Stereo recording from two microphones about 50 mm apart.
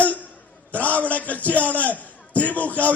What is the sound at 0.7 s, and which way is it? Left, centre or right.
A man's voice, left.